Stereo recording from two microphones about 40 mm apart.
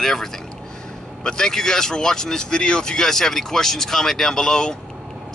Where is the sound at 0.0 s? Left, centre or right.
Centre.